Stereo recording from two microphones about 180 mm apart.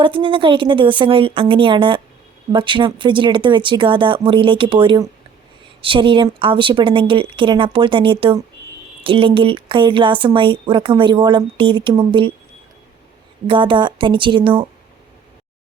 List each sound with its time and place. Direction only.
0.0 s speech: 30° right (ahead or behind)
13.5 s speech: 25° right (ahead or behind)